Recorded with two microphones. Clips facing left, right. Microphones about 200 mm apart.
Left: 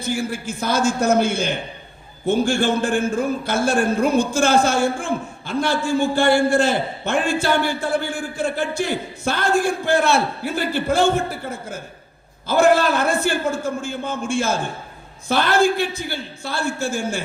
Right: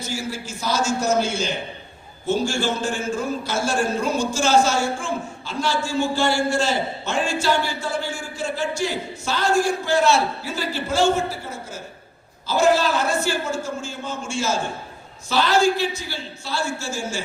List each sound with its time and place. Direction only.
0.0 s speech: 55° left (ahead or behind)